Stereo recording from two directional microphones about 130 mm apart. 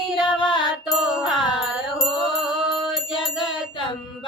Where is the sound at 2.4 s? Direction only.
5° right (ahead or behind).